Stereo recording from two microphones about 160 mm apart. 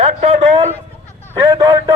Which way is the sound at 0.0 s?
40° right (ahead or behind).